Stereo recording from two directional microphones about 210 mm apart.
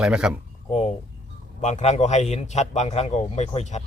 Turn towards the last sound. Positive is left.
turn(degrees=30)  # may be behind; listen again after turning